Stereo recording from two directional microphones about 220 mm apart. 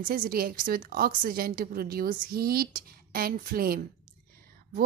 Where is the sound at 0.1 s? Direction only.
40° right (ahead or behind).